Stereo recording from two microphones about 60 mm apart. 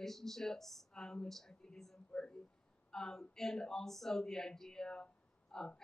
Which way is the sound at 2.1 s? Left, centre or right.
Centre.